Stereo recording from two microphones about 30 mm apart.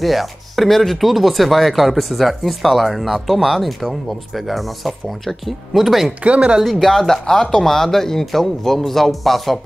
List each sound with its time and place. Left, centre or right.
0.0 s speech: centre
6.2 s speech: right
6.6 s speech: centre
7.2 s speech: centre
7.6 s speech: centre